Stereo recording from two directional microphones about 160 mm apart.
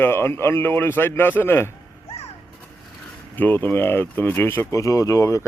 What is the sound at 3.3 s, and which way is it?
Speech, 10° left (ahead or behind).